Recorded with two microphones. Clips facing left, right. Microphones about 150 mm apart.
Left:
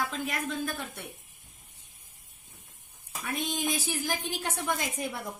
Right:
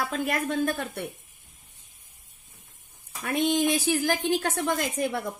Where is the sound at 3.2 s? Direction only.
70° right (ahead or behind).